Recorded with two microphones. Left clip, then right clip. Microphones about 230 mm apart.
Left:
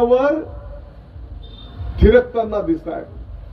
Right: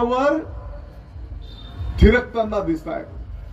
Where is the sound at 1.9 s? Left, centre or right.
Right.